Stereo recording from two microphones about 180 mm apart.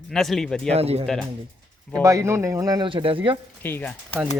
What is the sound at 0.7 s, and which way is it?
Speech, 35° right (ahead or behind).